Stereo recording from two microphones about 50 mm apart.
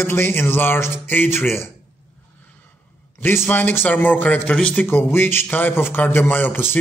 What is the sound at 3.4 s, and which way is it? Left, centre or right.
Speech, left.